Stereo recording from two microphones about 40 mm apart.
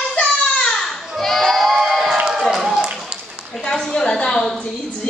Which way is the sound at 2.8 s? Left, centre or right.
Right.